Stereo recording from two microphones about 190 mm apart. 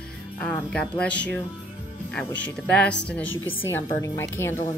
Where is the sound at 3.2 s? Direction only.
90° left.